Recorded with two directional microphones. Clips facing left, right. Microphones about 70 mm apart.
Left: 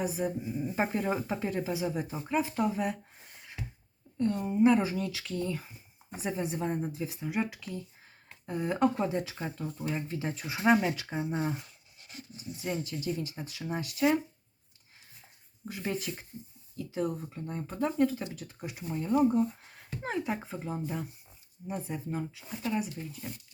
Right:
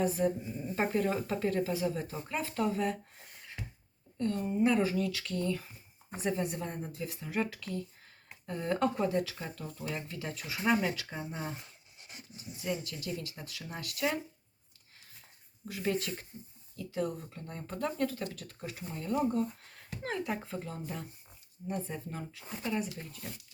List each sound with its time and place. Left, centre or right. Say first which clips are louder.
0.0 s a woman's voice: right 2 dB; centre
4.2 s a woman's voice: left 4 dB; centre
9.0 s speech: even; left
11.6 s a sound: even; right
12.8 s speech: left 5 dB; left
15.6 s a woman's voice: right 1 dB; left